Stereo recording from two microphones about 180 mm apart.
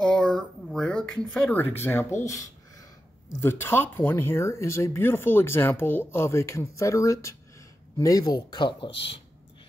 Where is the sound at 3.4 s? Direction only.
15° left (ahead or behind).